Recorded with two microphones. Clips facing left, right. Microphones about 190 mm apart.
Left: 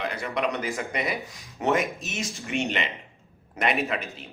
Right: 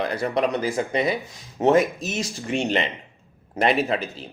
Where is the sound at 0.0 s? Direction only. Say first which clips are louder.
Right 5 dB; 35° right (ahead or behind).